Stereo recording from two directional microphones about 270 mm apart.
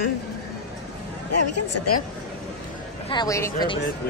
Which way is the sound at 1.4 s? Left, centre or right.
Left.